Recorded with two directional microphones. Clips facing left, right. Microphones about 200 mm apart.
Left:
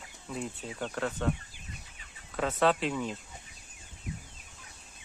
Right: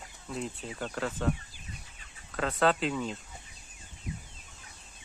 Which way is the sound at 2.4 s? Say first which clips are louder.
Even; centre (ahead or behind).